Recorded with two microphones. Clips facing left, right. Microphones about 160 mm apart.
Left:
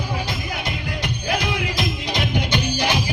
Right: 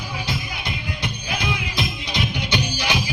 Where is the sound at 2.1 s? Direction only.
50° left (ahead or behind).